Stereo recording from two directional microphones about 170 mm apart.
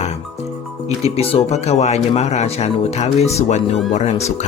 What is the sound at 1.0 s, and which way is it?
Speech, 35° left (ahead or behind).